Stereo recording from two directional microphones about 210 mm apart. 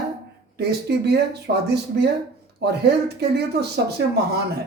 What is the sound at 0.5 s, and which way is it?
Speech, 50° right (ahead or behind).